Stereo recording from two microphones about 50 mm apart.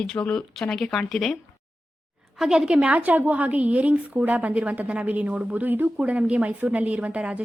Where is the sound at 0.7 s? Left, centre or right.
Centre.